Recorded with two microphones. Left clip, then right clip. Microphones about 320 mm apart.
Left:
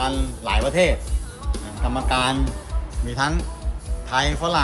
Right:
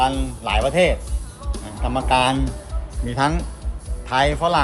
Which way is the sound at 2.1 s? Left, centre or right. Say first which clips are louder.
Right 4 dB; right.